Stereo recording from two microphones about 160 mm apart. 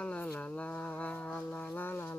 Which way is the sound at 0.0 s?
10° left (ahead or behind).